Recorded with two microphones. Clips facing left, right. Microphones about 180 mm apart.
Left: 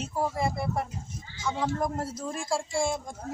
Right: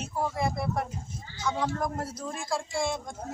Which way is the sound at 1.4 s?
5° left (ahead or behind).